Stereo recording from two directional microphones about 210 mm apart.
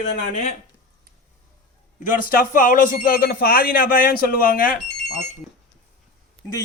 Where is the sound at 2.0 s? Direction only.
40° left (ahead or behind).